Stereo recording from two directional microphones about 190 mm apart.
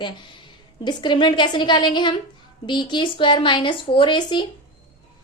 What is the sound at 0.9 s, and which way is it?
A woman's voice, 25° left (ahead or behind).